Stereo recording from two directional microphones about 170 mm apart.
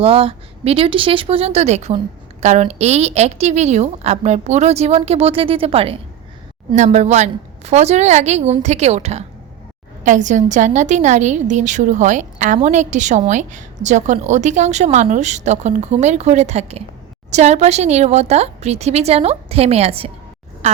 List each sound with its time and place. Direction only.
0.0 s a woman's voice: 35° right (ahead or behind)